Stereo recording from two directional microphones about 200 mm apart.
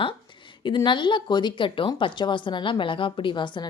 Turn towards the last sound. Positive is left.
turn(degrees=25)  # may be behind; listen again after turning